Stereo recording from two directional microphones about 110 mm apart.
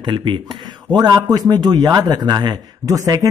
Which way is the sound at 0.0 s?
50° right (ahead or behind).